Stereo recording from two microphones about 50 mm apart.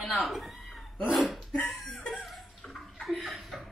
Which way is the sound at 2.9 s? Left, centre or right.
Centre.